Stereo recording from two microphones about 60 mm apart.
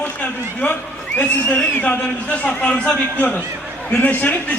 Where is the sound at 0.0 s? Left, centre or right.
Left.